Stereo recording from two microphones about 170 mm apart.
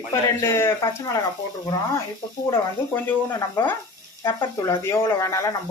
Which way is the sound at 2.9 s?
15° left (ahead or behind).